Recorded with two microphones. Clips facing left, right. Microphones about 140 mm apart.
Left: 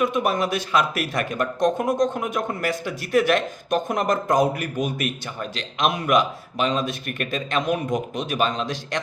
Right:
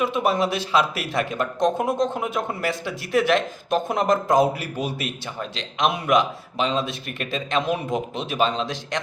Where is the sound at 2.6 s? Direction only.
25° right (ahead or behind).